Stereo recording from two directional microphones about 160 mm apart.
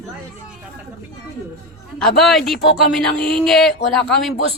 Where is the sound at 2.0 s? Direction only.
Centre (ahead or behind).